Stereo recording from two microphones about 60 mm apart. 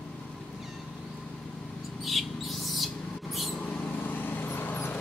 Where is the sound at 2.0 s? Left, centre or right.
Centre.